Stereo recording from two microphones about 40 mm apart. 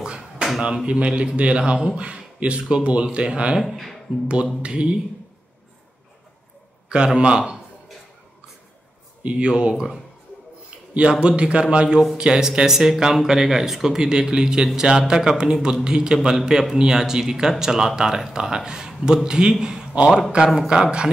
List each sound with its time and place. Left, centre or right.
0.0 s a sound: centre
0.8 s speech: right
3.6 s speech: centre
4.6 s speech: right
7.2 s speech: right
9.2 s speech: right
11.0 s speech: right
19.6 s a sound: centre
20.2 s speech: centre